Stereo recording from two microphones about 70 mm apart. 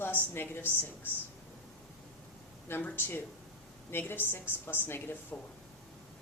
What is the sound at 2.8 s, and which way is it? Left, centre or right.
A woman's voice, left.